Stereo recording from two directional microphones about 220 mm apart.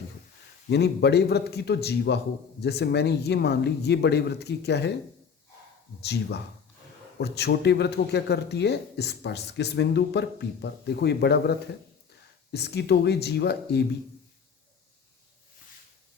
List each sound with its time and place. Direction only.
0.7 s speech: 50° left (ahead or behind)
7.2 s speech: 50° left (ahead or behind)